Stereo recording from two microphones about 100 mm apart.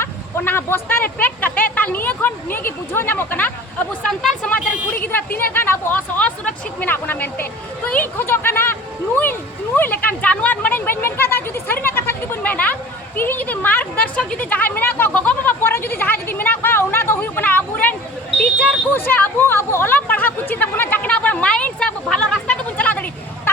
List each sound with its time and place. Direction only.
0.0 s speech: 25° left (ahead or behind)
13.1 s a sound: 20° left (ahead or behind)
18.9 s chatter: 20° left (ahead or behind)